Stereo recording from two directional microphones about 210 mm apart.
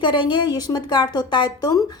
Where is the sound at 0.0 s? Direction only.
20° left (ahead or behind).